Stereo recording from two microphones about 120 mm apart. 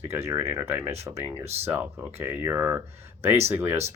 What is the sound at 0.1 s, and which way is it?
Speech, 20° right (ahead or behind).